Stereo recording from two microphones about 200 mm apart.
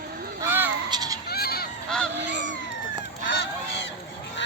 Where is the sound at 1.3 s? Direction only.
50° left (ahead or behind).